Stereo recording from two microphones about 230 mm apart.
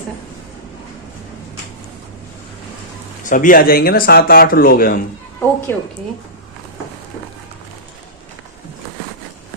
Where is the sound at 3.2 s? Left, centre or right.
Left.